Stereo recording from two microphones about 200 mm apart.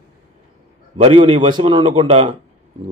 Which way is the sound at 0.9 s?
30° right (ahead or behind).